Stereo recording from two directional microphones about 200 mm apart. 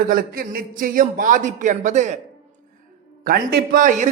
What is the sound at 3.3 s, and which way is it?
Speech, 45° right (ahead or behind).